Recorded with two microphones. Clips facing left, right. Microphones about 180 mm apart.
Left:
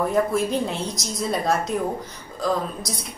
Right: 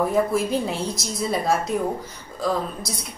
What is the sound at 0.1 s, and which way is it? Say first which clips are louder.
Speech: even; centre (ahead or behind).